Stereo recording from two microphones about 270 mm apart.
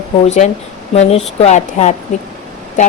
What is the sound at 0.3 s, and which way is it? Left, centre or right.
Speech, left.